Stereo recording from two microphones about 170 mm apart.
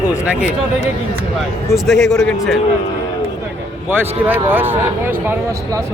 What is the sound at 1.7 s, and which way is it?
Speech, centre (ahead or behind).